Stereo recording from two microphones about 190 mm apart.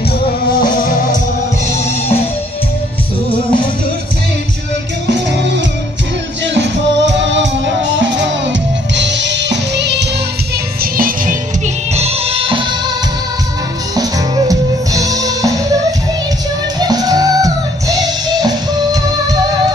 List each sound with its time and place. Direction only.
6.4 s music: 70° right (ahead or behind)
10.8 s music: 50° right (ahead or behind)
11.9 s music: 35° right (ahead or behind)
13.9 s music: 20° right (ahead or behind)
16.8 s music: 20° right (ahead or behind)